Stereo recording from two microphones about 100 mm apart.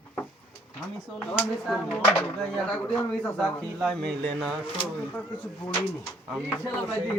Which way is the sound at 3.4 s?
Centre (ahead or behind).